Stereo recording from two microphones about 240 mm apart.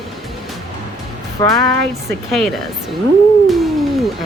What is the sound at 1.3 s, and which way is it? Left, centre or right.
Speech, centre.